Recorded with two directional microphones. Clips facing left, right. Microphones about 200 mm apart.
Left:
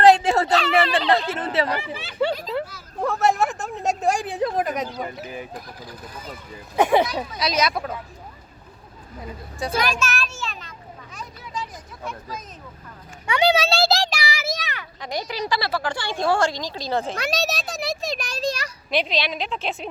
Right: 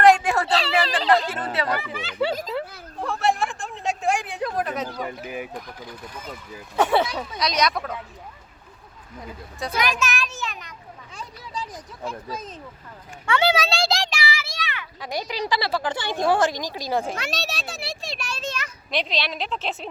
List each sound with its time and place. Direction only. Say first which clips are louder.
0.0 s a sound: left 2 dB; 25° left (ahead or behind)
0.5 s a sound: left 3 dB; 30° right (ahead or behind)
1.1 s speech: even; 25° left (ahead or behind)
2.2 s a woman's voice: left 2 dB; 5° right (ahead or behind)
3.1 s speech: left 2 dB; 40° left (ahead or behind); by 5.0 s 15° left (ahead or behind)
5.2 s speech: right 2 dB; 15° right (ahead or behind)
6.7 s a woman's voice: left 2 dB; 15° left (ahead or behind)
9.7 s a child's voice: even; 20° right (ahead or behind)
11.1 s a sound: left 1 dB; 30° right (ahead or behind)
12.0 s speech: right 2 dB; 30° right (ahead or behind)
13.2 s a sound: left 2 dB; 20° left (ahead or behind); by 14.8 s 40° left (ahead or behind)
15.3 s speech: right 1 dB; 15° right (ahead or behind)
17.2 s speech: left 5 dB; 40° left (ahead or behind)
18.9 s a woman's voice: left 3 dB; centre (ahead or behind)